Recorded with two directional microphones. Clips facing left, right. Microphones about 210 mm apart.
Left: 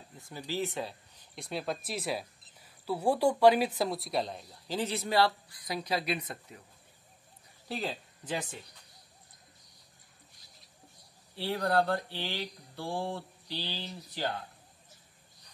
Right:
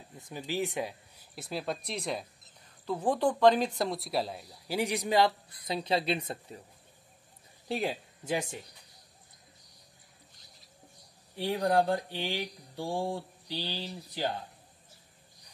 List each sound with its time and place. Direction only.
0.3 s speech: 15° right (ahead or behind)
7.6 s speech: 20° right (ahead or behind)
8.2 s speech: 10° right (ahead or behind)
11.3 s speech: 15° right (ahead or behind)